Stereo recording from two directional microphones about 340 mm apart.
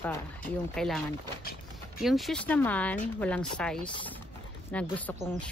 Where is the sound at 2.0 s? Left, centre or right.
Centre.